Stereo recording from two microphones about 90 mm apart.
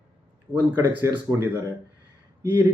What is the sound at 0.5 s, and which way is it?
A man's voice, 20° right (ahead or behind).